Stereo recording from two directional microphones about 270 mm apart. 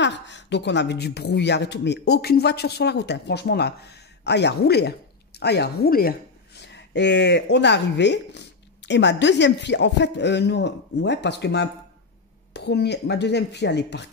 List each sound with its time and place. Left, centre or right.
0.0 s speech: left